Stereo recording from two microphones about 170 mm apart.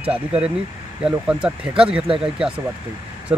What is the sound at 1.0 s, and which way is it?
Speech, 5° right (ahead or behind).